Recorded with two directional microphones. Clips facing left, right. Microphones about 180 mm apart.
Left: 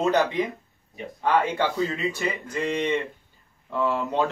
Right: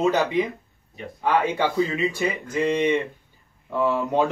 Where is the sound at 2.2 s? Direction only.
10° right (ahead or behind).